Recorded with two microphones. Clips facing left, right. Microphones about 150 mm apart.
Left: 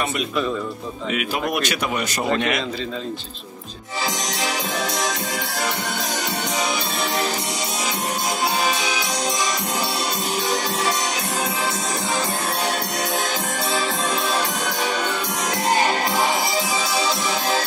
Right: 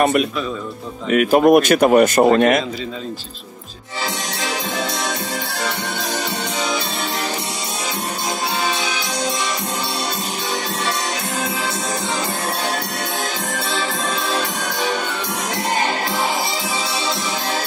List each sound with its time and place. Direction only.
0.0 s speech: 60° right (ahead or behind)
1.1 s a man's voice: 50° right (ahead or behind)